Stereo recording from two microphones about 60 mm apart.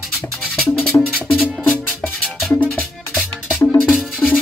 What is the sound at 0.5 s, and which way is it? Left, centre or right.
Music, centre.